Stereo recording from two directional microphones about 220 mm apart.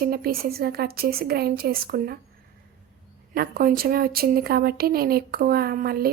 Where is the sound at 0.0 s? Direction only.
45° right (ahead or behind).